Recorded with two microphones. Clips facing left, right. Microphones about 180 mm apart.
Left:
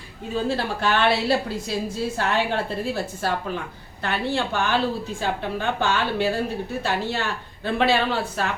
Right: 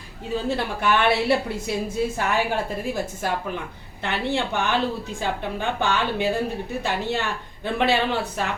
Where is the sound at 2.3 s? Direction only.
10° right (ahead or behind).